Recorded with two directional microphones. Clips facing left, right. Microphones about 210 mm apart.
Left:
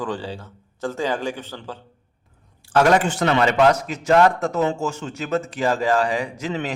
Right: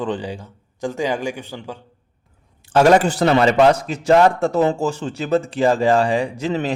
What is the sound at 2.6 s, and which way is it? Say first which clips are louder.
A man's voice: right 4 dB; 25° right (ahead or behind).